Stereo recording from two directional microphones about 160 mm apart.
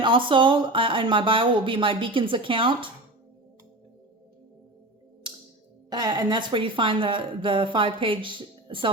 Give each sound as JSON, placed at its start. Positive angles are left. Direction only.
{"t": 0.0, "sound": "a woman's voice", "side_deg": -30}
{"t": 5.9, "sound": "a woman's voice", "side_deg": -25}